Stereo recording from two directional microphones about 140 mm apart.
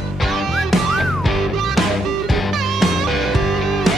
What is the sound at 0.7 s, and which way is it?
Music, centre (ahead or behind).